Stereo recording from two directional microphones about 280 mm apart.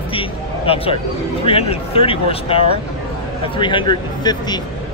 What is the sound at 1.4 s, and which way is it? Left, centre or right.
Speech, left.